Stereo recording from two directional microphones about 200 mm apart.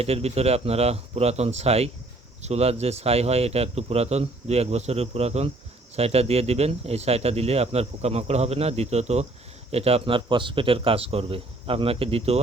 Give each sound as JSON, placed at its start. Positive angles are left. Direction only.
{"t": 0.0, "sound": "speech", "side_deg": -30}